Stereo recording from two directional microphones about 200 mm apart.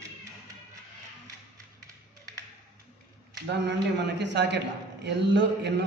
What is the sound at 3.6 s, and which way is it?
A man's voice, 60° right (ahead or behind).